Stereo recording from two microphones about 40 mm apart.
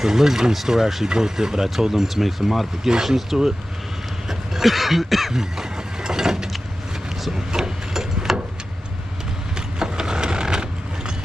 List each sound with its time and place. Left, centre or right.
0.0 s speech: centre
4.3 s a sound: centre
5.3 s vehicle: centre
7.3 s wood: centre
9.8 s mechanisms: centre